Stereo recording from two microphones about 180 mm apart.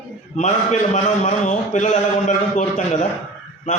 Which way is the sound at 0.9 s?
40° left (ahead or behind).